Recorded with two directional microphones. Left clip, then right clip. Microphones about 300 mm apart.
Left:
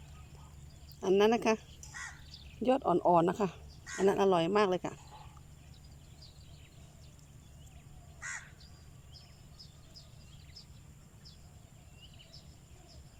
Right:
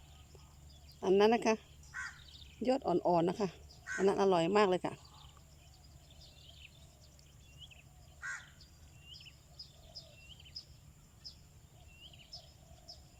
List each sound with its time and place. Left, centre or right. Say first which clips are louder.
0.9 s speech: left 1 dB; centre
1.9 s crow: right 1 dB; centre
2.6 s speech: left 4 dB; centre